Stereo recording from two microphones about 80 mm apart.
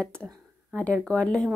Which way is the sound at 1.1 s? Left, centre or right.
Centre.